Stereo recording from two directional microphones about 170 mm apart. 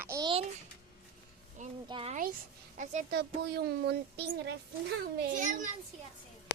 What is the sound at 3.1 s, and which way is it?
A woman's voice, 75° right (ahead or behind).